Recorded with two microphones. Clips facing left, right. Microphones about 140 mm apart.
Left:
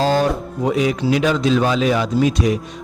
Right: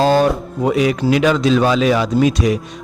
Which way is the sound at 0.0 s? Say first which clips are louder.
Right 3 dB; 65° right (ahead or behind).